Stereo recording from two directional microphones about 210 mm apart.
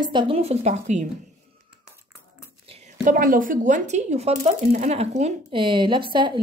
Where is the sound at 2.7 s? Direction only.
30° right (ahead or behind).